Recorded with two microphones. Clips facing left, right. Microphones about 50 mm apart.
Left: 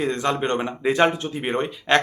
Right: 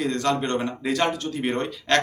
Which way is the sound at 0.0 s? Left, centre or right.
Left.